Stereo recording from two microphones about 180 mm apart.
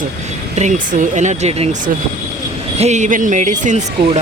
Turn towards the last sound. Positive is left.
turn(degrees=-45)  # may be behind; listen again after turning